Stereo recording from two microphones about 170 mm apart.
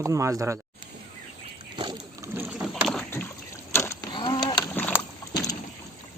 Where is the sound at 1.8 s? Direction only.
25° right (ahead or behind).